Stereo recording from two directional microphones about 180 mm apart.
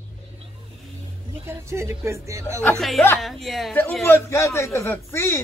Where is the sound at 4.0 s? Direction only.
15° left (ahead or behind).